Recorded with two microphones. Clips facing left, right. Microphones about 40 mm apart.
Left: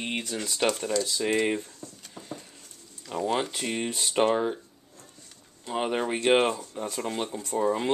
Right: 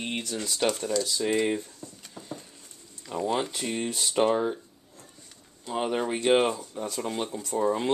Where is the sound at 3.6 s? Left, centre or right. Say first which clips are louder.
Even; left.